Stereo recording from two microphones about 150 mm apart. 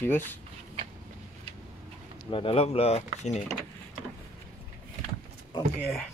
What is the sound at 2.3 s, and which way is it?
Speech, 40° left (ahead or behind).